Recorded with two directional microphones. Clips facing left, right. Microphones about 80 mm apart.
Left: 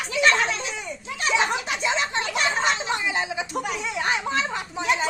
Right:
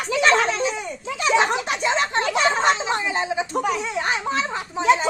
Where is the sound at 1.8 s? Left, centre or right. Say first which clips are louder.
Right 3 dB; right.